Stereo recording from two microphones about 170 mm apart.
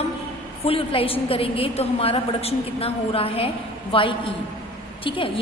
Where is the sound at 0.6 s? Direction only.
35° left (ahead or behind).